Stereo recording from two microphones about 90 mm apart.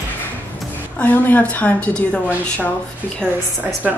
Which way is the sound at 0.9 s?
20° left (ahead or behind).